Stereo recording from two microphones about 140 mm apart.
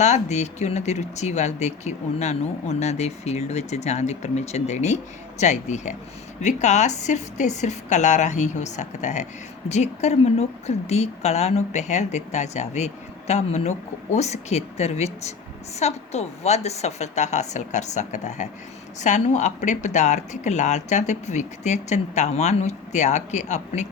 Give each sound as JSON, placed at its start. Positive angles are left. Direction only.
{"t": 0.0, "sound": "a woman's voice", "side_deg": 55}